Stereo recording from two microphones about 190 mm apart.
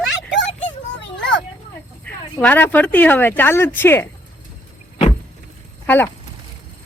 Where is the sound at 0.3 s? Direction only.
75° left (ahead or behind).